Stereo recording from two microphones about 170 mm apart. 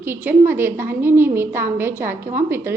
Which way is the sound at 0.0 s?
10° right (ahead or behind).